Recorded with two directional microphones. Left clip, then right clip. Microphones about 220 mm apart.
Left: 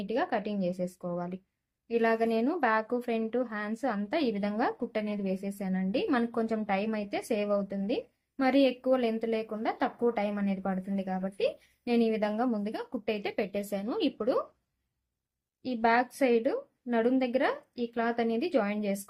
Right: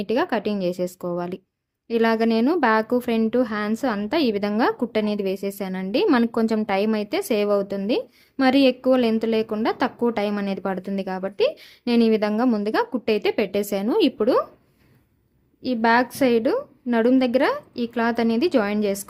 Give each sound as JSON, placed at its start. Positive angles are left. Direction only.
{"t": 0.0, "sound": "speech", "side_deg": -50}
{"t": 15.6, "sound": "speech", "side_deg": -50}